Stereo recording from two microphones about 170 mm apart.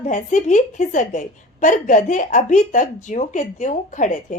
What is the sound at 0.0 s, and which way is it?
A woman's voice, 45° left (ahead or behind).